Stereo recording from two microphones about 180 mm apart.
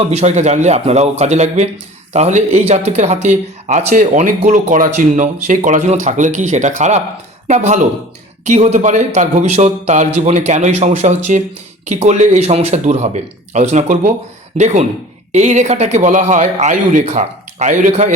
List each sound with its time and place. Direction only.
0.1 s speech: 40° right (ahead or behind)